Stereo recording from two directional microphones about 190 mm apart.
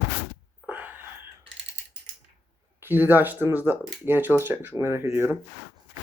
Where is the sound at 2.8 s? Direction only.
10° right (ahead or behind).